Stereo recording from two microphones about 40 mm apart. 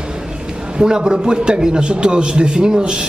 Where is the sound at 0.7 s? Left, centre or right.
Centre.